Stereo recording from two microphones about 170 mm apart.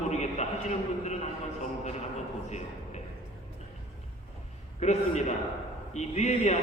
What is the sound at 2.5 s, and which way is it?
Speech, 40° left (ahead or behind).